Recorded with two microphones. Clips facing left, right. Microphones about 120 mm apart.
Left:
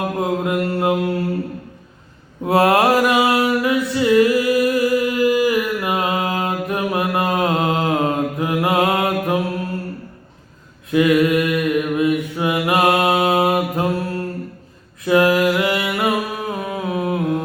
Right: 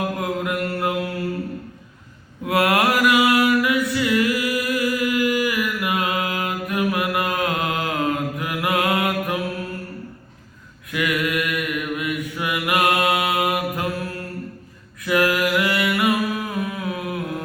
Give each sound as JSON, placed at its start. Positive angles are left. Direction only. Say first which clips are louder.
{"t": 0.0, "sound": "mantra", "louder": "left 4 dB", "side_deg": 25}
{"t": 2.4, "sound": "mantra", "louder": "left 5 dB", "side_deg": 30}
{"t": 10.9, "sound": "mantra", "louder": "left 9 dB", "side_deg": 30}
{"t": 15.0, "sound": "a sound", "louder": "left 5 dB", "side_deg": 25}